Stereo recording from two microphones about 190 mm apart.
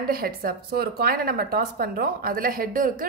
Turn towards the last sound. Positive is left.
turn(degrees=-50)  # may be behind; listen again after turning